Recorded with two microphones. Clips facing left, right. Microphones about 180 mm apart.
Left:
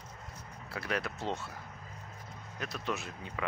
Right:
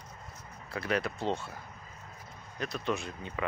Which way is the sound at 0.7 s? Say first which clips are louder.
Right 4 dB; centre (ahead or behind).